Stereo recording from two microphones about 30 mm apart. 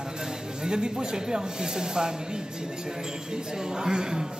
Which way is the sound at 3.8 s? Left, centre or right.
Right.